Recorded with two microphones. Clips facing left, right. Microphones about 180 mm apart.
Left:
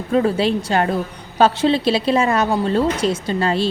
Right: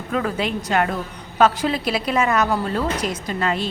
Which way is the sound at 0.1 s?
30° left (ahead or behind).